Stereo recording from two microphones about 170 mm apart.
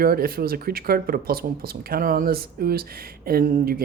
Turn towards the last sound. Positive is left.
turn(degrees=-55)  # may be behind; listen again after turning